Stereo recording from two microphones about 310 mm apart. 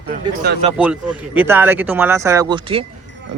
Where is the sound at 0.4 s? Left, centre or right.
Right.